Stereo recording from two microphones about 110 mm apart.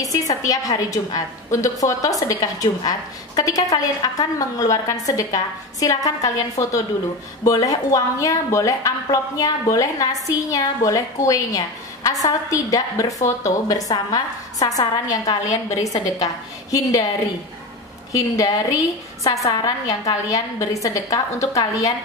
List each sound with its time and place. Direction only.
0.0 s a woman's voice: 35° left (ahead or behind)
18.1 s a woman's voice: 30° left (ahead or behind)